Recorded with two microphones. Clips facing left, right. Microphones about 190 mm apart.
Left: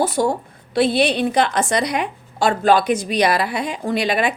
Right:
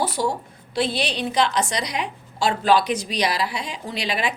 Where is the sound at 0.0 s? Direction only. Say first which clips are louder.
Left 5 dB; 50° left (ahead or behind).